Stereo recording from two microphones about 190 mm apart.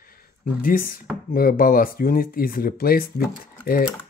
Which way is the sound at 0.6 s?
50° left (ahead or behind).